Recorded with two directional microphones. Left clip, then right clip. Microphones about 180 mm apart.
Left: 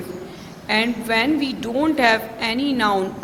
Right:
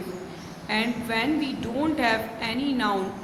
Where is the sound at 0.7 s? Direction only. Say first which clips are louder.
Left 7 dB; 45° left (ahead or behind).